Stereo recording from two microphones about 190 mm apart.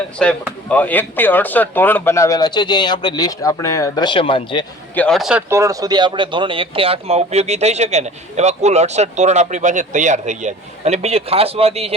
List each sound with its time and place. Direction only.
0.2 s speech: 5° left (ahead or behind); by 4.6 s 25° left (ahead or behind)
4.9 s speech: 5° left (ahead or behind)
5.5 s speech: 15° right (ahead or behind); by 11.9 s 30° right (ahead or behind)